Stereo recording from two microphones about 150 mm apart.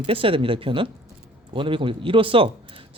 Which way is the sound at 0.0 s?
40° right (ahead or behind).